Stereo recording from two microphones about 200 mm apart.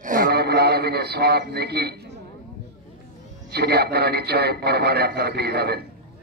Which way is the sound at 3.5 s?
55° right (ahead or behind).